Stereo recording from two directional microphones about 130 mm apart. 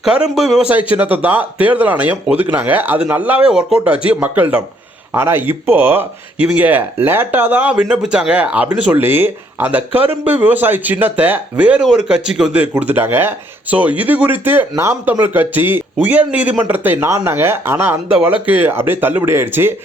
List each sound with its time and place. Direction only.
0.0 s speech: 5° right (ahead or behind)